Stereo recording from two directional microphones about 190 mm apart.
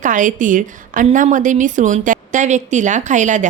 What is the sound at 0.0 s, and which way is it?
A woman's voice, 45° right (ahead or behind).